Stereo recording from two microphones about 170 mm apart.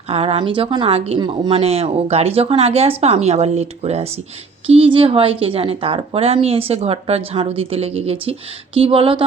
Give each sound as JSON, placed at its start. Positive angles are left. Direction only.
{"t": 0.1, "sound": "speech", "side_deg": -35}